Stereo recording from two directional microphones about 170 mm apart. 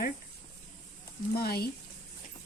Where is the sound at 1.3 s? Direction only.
65° left (ahead or behind).